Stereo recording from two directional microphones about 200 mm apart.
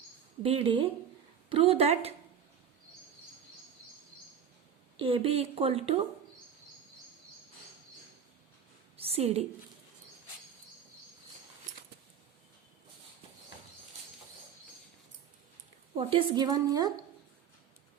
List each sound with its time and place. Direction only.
0.4 s speech: 30° right (ahead or behind)
4.9 s speech: 25° right (ahead or behind)
9.0 s a sound: 30° right (ahead or behind)
16.0 s speech: 25° right (ahead or behind)